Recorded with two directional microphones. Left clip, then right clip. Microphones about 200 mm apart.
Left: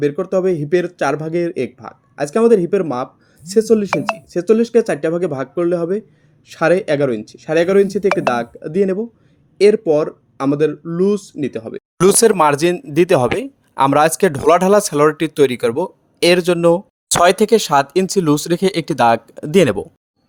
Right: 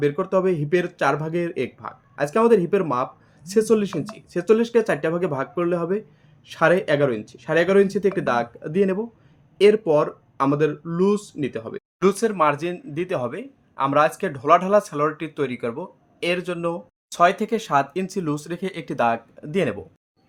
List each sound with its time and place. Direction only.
0.0 s speech: 15° left (ahead or behind)
11.9 s speech: 55° left (ahead or behind)